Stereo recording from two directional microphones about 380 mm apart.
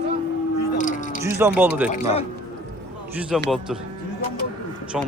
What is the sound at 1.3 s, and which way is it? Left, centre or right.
Speech, centre.